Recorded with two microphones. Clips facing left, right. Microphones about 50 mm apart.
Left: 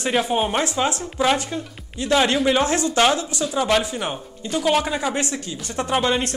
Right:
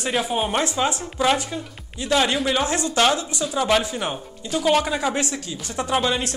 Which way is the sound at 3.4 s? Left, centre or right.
Centre.